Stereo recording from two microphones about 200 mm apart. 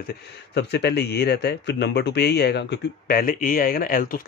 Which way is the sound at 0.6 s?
55° left (ahead or behind).